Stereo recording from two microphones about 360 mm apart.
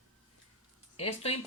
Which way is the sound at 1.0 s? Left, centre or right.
Centre.